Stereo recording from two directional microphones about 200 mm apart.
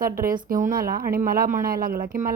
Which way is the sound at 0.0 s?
45° right (ahead or behind).